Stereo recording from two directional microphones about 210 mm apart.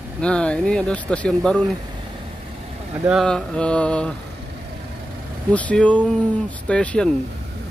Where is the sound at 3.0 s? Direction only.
Centre (ahead or behind).